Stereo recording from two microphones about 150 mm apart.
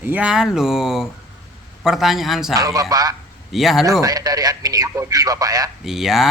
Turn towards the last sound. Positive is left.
turn(degrees=0)  # may be behind; listen again after turning